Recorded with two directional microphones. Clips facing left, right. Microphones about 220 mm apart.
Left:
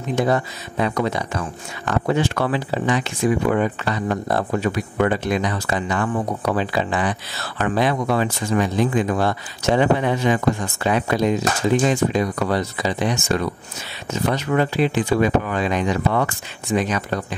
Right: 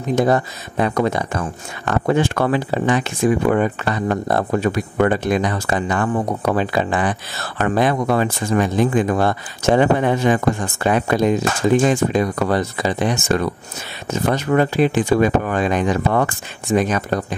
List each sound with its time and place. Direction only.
0.1 s speech: 45° right (ahead or behind)